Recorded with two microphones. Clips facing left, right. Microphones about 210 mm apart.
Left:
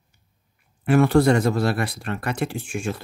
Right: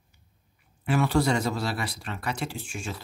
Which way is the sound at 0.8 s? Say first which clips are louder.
Left 7 dB; 55° left (ahead or behind).